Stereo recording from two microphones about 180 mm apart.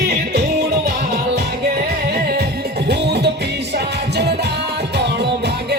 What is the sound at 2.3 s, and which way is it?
Music, 65° right (ahead or behind).